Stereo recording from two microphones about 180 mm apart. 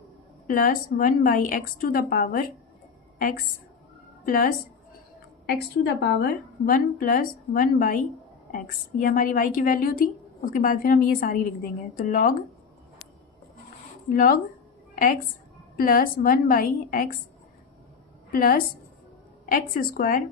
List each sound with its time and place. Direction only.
0.4 s a woman's voice: 50° left (ahead or behind)
5.5 s a woman's voice: 65° left (ahead or behind)
6.7 s a woman's voice: 50° left (ahead or behind)
14.1 s a woman's voice: 55° left (ahead or behind)
18.3 s a woman's voice: 55° left (ahead or behind)